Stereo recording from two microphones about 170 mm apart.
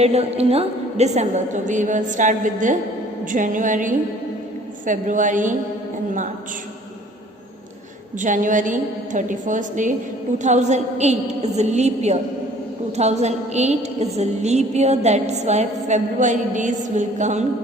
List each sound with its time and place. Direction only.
0.0 s a woman's voice: 40° right (ahead or behind)
8.2 s a woman's voice: 50° right (ahead or behind)